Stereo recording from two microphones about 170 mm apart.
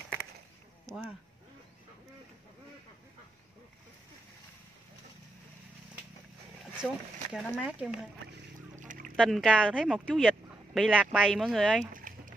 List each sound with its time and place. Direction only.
7.3 s speech: 5° right (ahead or behind)
8.7 s goose: 50° right (ahead or behind)
9.1 s speech: centre (ahead or behind)
11.8 s a sound: 50° right (ahead or behind)